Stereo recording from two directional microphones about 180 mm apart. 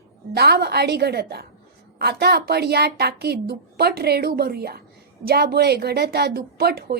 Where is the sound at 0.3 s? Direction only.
65° right (ahead or behind).